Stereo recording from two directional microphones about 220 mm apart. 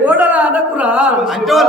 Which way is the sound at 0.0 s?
5° right (ahead or behind).